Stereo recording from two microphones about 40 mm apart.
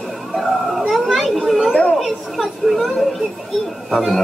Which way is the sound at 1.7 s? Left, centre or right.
Left.